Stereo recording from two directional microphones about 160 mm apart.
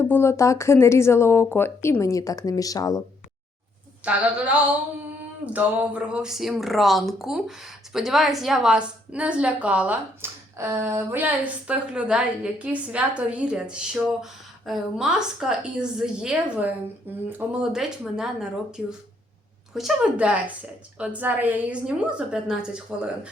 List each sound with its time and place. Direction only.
0.0 s speech: 15° left (ahead or behind)
4.0 s a woman's voice: 10° right (ahead or behind)
5.5 s a woman's voice: 5° right (ahead or behind)